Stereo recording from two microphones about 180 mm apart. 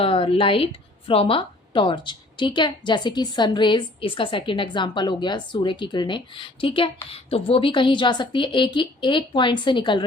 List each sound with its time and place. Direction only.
0.0 s a woman's voice: 30° left (ahead or behind)